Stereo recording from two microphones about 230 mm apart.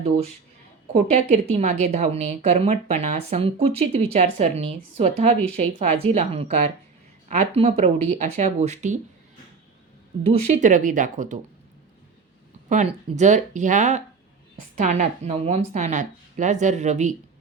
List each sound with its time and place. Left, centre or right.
0.9 s a woman's voice: right
10.4 s speech: right
12.6 s speech: right